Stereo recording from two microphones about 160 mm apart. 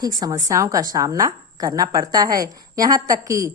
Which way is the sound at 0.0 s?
25° right (ahead or behind).